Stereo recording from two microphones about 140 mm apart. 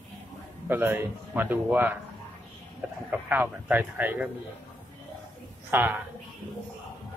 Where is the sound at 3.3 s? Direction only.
10° right (ahead or behind).